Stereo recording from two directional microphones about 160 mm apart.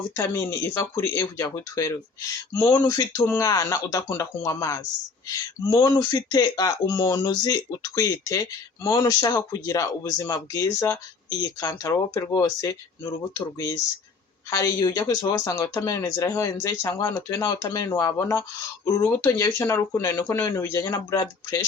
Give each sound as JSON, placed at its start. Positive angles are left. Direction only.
{"t": 0.2, "sound": "speech", "side_deg": 20}